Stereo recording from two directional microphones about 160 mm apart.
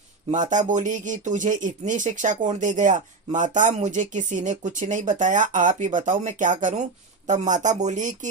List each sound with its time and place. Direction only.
0.7 s speech: 50° right (ahead or behind)